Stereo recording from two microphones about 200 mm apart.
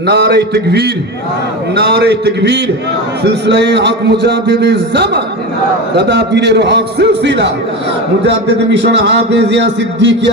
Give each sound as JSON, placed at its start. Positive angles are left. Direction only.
{"t": 0.0, "sound": "a man's voice", "side_deg": -55}